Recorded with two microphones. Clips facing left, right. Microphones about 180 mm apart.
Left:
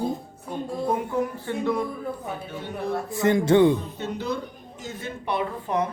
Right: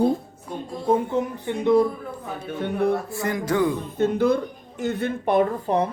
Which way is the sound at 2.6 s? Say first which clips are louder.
Right 10 dB; 60° right (ahead or behind).